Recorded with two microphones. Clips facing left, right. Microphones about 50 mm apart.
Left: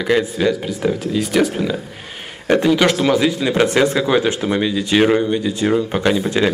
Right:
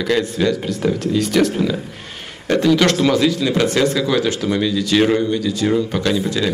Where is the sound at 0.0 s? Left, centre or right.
Centre.